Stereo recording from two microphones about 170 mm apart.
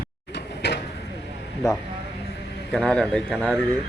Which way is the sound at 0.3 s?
90° left.